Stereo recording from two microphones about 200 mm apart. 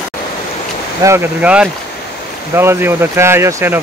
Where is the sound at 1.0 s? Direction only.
10° right (ahead or behind).